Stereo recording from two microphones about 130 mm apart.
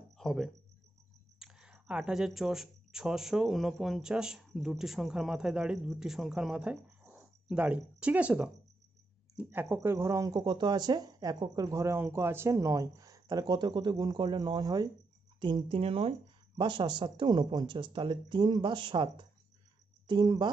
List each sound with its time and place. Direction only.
0.2 s speech: centre (ahead or behind); by 14.9 s 30° right (ahead or behind)
15.4 s speech: 40° right (ahead or behind)